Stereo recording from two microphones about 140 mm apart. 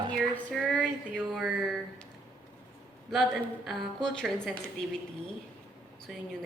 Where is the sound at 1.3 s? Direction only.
Centre (ahead or behind).